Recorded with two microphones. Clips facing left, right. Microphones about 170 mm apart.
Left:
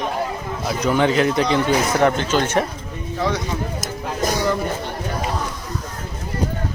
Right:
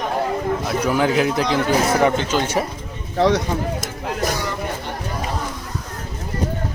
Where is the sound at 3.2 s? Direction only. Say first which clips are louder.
Right 6 dB; 70° right (ahead or behind).